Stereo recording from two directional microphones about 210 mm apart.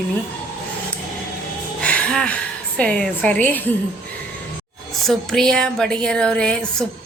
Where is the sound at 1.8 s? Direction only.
5° left (ahead or behind).